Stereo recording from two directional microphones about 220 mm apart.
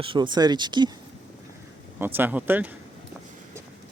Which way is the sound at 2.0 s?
10° right (ahead or behind).